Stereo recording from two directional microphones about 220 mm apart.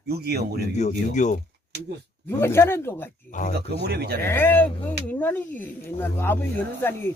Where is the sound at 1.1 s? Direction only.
35° left (ahead or behind).